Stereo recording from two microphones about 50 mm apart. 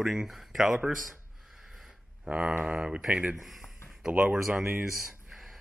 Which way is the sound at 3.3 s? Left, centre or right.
Centre.